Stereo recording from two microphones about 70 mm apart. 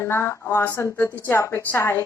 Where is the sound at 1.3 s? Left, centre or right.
Left.